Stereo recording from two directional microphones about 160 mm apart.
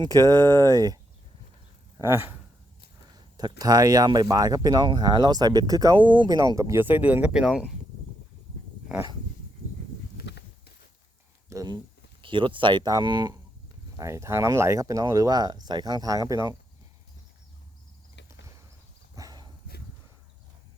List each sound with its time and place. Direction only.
0.0 s speech: 20° right (ahead or behind)
0.4 s speech: 15° left (ahead or behind)
0.7 s speech: 25° right (ahead or behind)
2.0 s speech: 15° right (ahead or behind)
3.6 s speech: 25° right (ahead or behind); by 7.6 s 5° right (ahead or behind)
10.2 s a sound: 90° left
11.4 s speech: 20° right (ahead or behind)
19.1 s dog: 25° right (ahead or behind)